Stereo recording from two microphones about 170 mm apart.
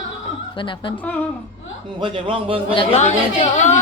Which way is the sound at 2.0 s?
30° right (ahead or behind).